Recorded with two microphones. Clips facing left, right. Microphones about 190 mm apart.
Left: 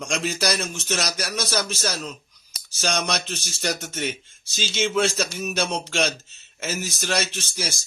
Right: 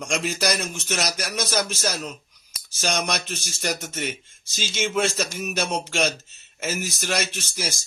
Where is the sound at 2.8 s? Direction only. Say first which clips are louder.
Even; 10° right (ahead or behind).